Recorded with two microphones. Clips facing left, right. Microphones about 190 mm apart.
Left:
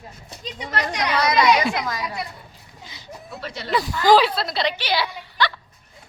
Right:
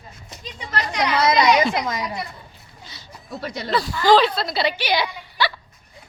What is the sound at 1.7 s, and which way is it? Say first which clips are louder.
Speech: right 2 dB; 20° right (ahead or behind).